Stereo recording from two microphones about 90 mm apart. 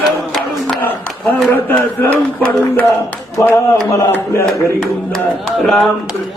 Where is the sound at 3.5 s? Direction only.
35° left (ahead or behind).